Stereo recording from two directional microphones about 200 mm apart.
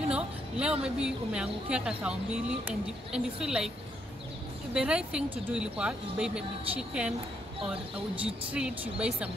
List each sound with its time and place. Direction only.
0.1 s speech: 5° right (ahead or behind)
4.7 s speech: 5° right (ahead or behind)
8.2 s speech: 5° right (ahead or behind)